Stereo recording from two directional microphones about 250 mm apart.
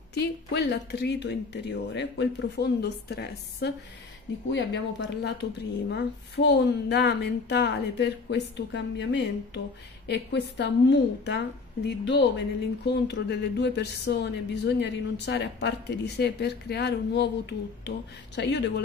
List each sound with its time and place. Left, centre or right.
0.1 s a woman's voice: left